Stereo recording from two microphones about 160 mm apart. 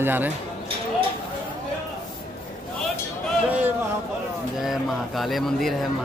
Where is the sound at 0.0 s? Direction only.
10° right (ahead or behind).